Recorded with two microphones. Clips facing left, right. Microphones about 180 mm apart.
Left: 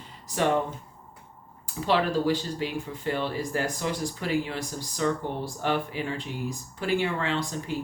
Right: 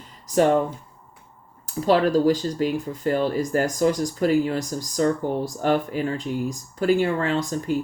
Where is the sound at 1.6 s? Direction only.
40° right (ahead or behind).